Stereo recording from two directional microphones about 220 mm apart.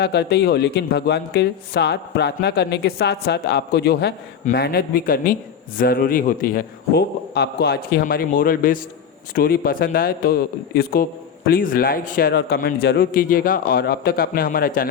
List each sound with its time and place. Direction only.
0.0 s a man's voice: 50° left (ahead or behind)